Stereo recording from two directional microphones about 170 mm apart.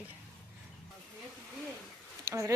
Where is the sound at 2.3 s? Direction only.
20° right (ahead or behind).